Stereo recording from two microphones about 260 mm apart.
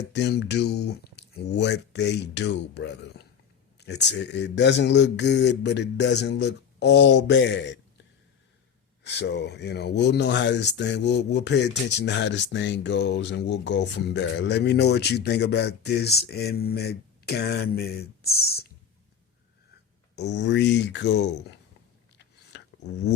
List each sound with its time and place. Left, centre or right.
0.0 s speech: left
9.0 s speech: left
20.1 s speech: left
22.2 s a sound: left